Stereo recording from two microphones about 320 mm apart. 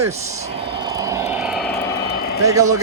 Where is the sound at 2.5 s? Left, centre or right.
Centre.